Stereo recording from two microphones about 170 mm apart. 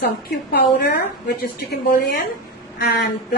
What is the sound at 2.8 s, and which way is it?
Speech, 70° left (ahead or behind).